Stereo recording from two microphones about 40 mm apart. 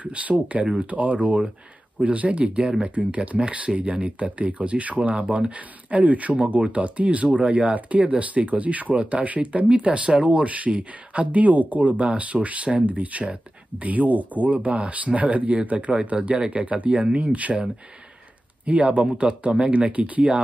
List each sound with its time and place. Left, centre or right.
0.0 s speech: right
18.7 s speech: right